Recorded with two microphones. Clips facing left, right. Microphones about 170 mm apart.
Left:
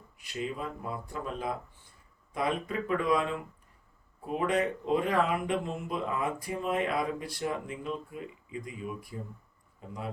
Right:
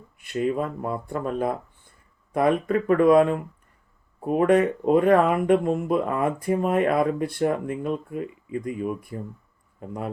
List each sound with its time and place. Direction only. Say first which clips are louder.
0.2 s speech: right 11 dB; 55° right (ahead or behind)